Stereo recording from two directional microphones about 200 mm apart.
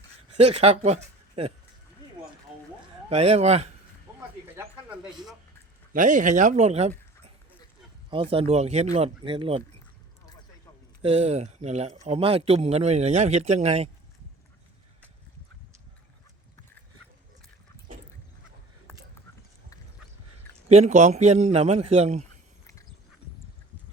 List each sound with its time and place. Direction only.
0.3 s speech: 30° right (ahead or behind)
3.1 s speech: 30° right (ahead or behind)
4.5 s a sound: 5° right (ahead or behind)
5.9 s speech: 40° right (ahead or behind)
8.1 s speech: 25° right (ahead or behind)
11.0 s speech: 30° right (ahead or behind)
20.7 s speech: 35° right (ahead or behind)